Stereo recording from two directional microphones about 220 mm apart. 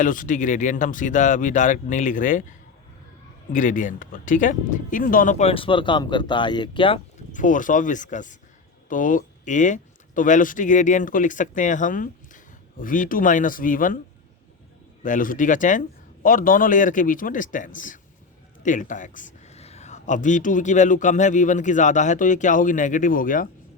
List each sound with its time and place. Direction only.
0.0 s speech: 35° left (ahead or behind)
15.0 s speech: 35° left (ahead or behind)